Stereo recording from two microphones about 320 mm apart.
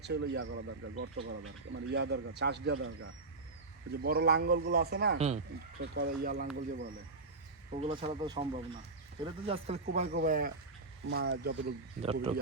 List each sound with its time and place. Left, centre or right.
0.0 s speech: right
3.9 s a man's voice: right
5.8 s a man's voice: right
7.7 s a man's voice: centre